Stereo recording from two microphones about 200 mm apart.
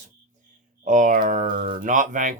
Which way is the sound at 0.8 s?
40° right (ahead or behind).